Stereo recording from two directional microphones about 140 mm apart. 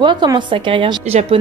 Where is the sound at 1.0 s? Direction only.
50° right (ahead or behind).